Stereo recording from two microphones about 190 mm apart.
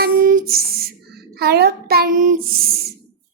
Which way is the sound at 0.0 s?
45° right (ahead or behind).